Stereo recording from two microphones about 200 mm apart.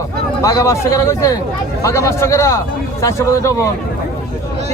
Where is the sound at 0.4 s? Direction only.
15° left (ahead or behind).